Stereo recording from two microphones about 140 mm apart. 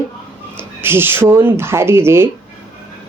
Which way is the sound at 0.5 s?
15° right (ahead or behind).